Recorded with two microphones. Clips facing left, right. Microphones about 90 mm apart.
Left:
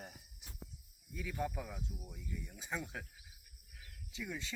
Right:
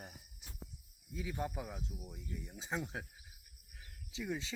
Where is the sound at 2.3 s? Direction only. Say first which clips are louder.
Right 1 dB; 35° right (ahead or behind).